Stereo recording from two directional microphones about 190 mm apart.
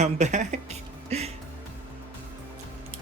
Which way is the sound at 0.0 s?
40° right (ahead or behind).